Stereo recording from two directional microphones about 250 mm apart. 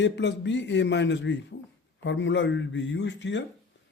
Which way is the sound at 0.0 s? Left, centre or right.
Left.